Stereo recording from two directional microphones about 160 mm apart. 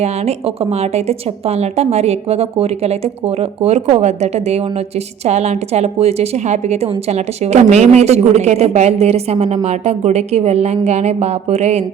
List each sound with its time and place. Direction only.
0.0 s a woman's voice: 40° right (ahead or behind)